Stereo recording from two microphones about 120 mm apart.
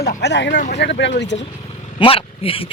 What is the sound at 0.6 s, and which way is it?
Speech, 90° left.